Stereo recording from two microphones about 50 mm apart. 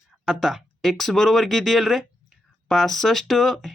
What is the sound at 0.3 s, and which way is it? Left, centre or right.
Speech, centre.